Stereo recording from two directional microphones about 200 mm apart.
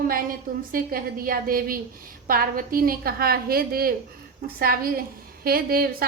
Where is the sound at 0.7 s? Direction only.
45° right (ahead or behind).